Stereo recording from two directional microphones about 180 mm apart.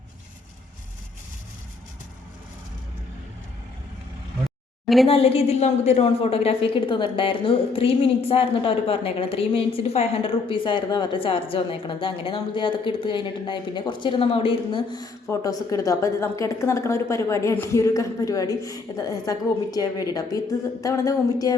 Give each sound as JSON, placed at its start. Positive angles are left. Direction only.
{"t": 5.0, "sound": "a woman's voice", "side_deg": 30}